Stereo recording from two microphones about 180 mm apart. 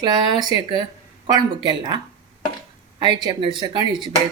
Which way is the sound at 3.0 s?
25° right (ahead or behind).